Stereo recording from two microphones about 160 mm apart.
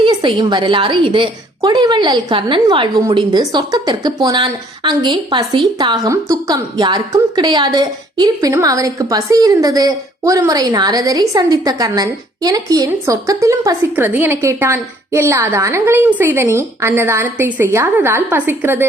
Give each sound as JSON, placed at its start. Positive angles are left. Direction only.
{"t": 0.0, "sound": "a woman's voice", "side_deg": -30}